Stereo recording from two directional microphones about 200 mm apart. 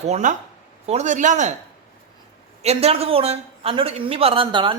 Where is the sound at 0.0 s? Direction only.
35° right (ahead or behind).